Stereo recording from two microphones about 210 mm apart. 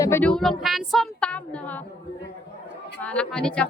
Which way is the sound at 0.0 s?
10° left (ahead or behind).